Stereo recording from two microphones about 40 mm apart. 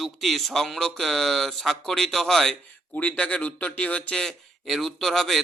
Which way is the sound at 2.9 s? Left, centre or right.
Left.